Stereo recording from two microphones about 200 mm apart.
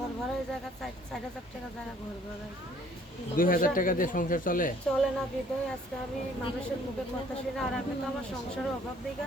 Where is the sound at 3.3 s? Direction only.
45° left (ahead or behind).